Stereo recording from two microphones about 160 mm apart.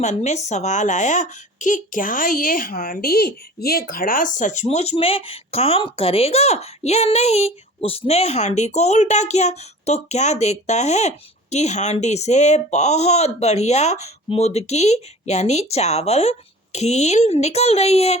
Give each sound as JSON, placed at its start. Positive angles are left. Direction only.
{"t": 0.0, "sound": "speech", "side_deg": 45}